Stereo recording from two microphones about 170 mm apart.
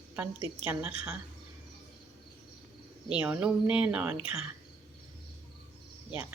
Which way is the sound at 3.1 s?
10° right (ahead or behind).